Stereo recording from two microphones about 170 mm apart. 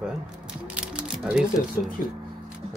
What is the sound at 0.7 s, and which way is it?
Mechanisms, 5° right (ahead or behind).